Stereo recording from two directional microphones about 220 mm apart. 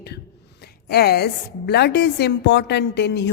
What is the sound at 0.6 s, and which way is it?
A woman's voice, 45° left (ahead or behind).